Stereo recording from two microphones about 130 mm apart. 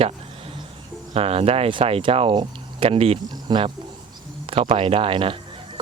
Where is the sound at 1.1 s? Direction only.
50° right (ahead or behind).